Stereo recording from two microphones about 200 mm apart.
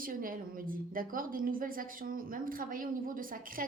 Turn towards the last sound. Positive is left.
turn(degrees=-45)  # may be behind; listen again after turning